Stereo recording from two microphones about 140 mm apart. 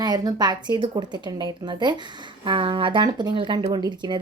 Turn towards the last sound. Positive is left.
turn(degrees=-30)  # may be behind; listen again after turning